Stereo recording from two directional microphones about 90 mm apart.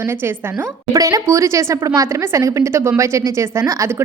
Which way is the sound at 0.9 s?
40° right (ahead or behind).